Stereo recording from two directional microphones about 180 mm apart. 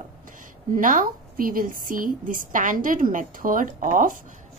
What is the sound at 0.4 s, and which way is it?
A woman's voice, 50° right (ahead or behind).